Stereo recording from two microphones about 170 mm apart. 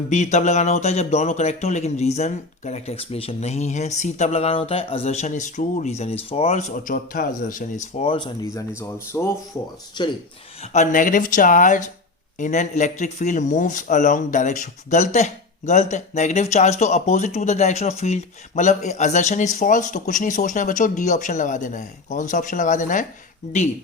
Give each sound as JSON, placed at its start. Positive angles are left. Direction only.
{"t": 0.1, "sound": "speech", "side_deg": 45}
{"t": 8.4, "sound": "speech", "side_deg": 20}
{"t": 10.6, "sound": "speech", "side_deg": 45}